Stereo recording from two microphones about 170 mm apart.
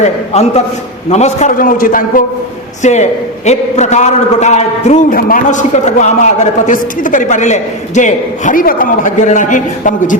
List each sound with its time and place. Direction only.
0.0 s a man's voice: 40° left (ahead or behind)
2.8 s a man's voice: 45° left (ahead or behind)